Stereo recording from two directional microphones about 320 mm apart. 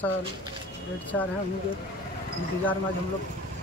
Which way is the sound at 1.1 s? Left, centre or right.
Centre.